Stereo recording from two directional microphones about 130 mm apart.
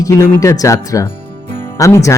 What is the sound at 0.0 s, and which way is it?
Speech, 25° left (ahead or behind).